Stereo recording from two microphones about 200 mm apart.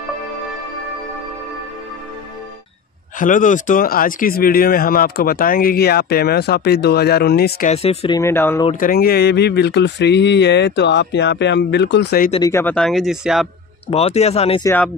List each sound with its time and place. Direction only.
3.2 s speech: 40° left (ahead or behind)
7.7 s speech: 30° left (ahead or behind)
8.2 s speech: 10° left (ahead or behind)
8.7 s speech: 45° left (ahead or behind)
12.3 s speech: 20° left (ahead or behind); by 13.5 s centre (ahead or behind)
13.8 s speech: 30° left (ahead or behind)
14.6 s speech: 10° left (ahead or behind)